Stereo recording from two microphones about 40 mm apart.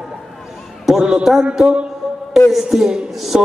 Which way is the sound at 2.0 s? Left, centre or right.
Centre.